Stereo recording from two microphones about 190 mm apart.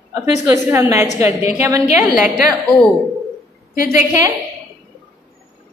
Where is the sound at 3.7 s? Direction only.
45° left (ahead or behind).